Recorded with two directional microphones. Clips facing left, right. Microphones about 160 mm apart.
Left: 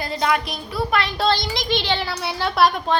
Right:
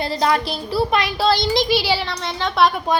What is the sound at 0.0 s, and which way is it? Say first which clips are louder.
Speech: right 3 dB; 35° right (ahead or behind).